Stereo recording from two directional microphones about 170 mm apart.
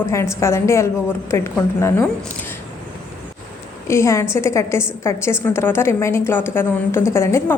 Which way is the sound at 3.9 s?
15° left (ahead or behind).